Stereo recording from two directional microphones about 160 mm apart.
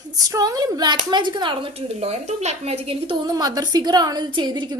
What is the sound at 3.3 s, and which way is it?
A woman's voice, 25° right (ahead or behind).